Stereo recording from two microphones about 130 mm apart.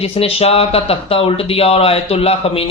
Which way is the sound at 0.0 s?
50° left (ahead or behind).